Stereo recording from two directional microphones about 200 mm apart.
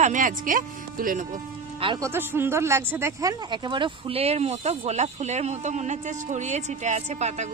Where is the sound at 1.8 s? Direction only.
25° right (ahead or behind).